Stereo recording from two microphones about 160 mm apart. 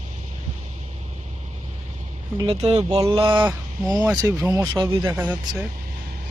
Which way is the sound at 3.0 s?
30° right (ahead or behind).